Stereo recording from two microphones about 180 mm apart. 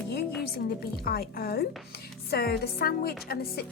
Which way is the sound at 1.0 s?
60° left (ahead or behind).